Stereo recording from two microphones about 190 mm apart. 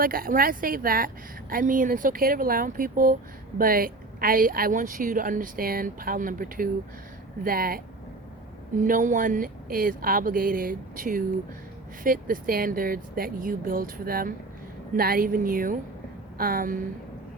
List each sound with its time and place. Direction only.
0.0 s a woman's voice: 50° right (ahead or behind)
8.8 s a woman's voice: 45° right (ahead or behind)